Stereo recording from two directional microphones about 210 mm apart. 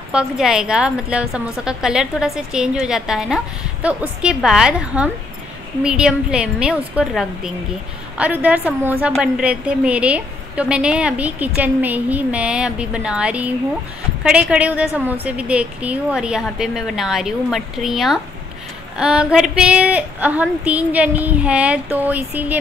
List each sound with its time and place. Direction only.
0.1 s a woman's voice: 5° right (ahead or behind)